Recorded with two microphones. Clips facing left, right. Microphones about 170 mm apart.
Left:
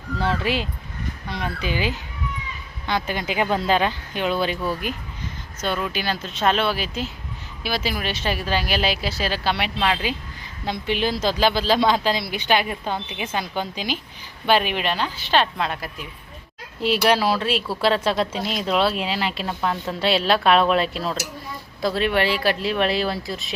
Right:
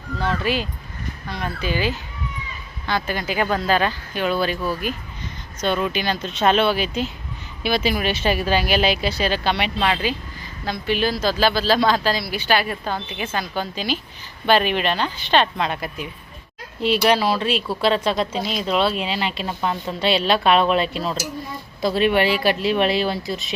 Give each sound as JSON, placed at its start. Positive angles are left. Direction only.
{"t": 0.2, "sound": "speech", "side_deg": 30}
{"t": 1.6, "sound": "speech", "side_deg": 15}
{"t": 5.6, "sound": "speech", "side_deg": 5}
{"t": 10.7, "sound": "speech", "side_deg": 20}
{"t": 19.5, "sound": "a woman's voice", "side_deg": -10}
{"t": 19.9, "sound": "speech", "side_deg": 5}
{"t": 22.6, "sound": "speech", "side_deg": 0}